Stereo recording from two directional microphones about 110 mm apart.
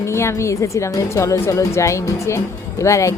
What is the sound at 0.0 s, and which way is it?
Speech, 25° left (ahead or behind).